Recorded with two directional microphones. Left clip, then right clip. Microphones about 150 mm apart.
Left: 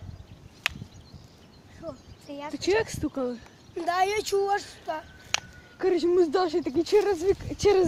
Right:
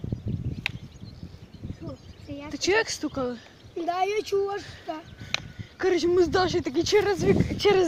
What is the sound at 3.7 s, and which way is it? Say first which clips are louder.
Speech: left 1 dB; 65° left (ahead or behind).